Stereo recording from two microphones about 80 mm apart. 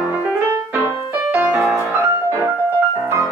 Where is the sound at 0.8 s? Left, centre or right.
Right.